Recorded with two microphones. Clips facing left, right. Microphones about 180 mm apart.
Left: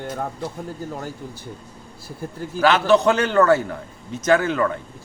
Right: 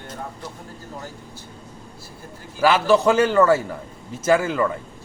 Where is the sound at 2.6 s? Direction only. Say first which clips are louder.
Left 1 dB; 5° right (ahead or behind).